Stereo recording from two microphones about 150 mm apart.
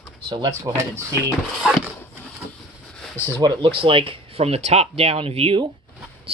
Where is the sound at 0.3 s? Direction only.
25° right (ahead or behind).